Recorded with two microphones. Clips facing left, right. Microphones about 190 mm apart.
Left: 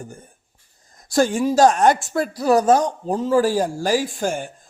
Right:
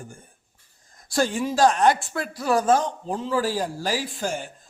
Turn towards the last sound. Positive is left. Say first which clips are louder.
# left 5 dB
turn(degrees=50)  # may be behind; listen again after turning